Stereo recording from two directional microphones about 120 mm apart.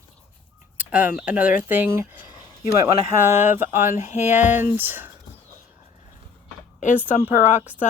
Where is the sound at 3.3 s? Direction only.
75° left (ahead or behind).